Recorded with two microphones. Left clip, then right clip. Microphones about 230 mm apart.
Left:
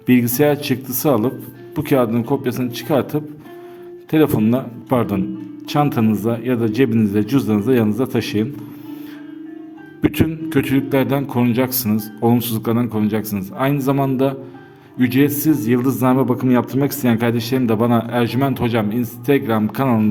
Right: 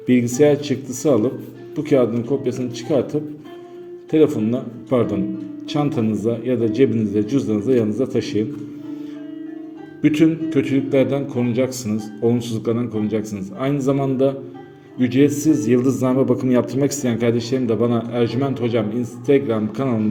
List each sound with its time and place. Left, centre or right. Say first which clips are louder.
0.0 s speech: even; left
10.0 s speech: right 3 dB; left